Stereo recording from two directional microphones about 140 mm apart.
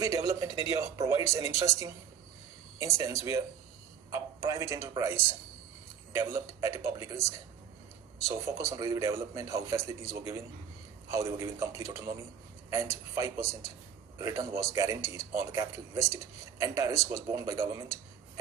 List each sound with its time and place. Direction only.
0.0 s a man's voice: 25° right (ahead or behind)